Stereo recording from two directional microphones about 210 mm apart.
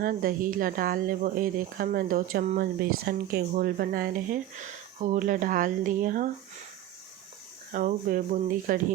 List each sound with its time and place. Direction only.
0.0 s speech: 45° right (ahead or behind)
3.1 s speech: 50° right (ahead or behind)
7.7 s speech: 40° right (ahead or behind)